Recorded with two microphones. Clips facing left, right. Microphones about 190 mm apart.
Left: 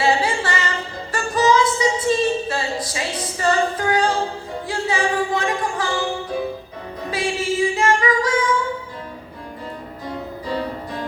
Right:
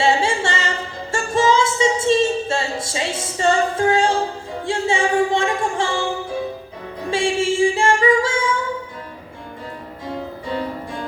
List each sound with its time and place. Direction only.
0.0 s a sound: 25° right (ahead or behind)
1.1 s child singing: 25° right (ahead or behind)
4.6 s music: 25° right (ahead or behind)
7.1 s music: 25° right (ahead or behind)